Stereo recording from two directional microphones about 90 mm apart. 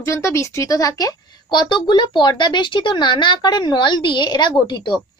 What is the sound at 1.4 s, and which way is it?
A woman's voice, 60° left (ahead or behind).